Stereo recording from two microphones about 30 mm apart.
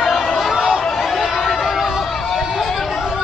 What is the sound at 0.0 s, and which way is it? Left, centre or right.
Chatter, centre.